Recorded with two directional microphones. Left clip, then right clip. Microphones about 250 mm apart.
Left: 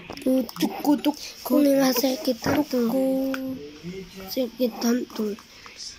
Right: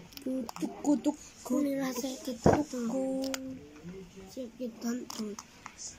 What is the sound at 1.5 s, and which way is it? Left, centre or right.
Speech, centre.